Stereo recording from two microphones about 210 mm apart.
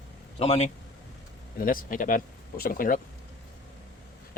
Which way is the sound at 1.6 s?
40° left (ahead or behind).